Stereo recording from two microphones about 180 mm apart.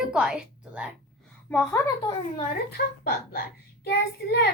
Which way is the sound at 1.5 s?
10° left (ahead or behind).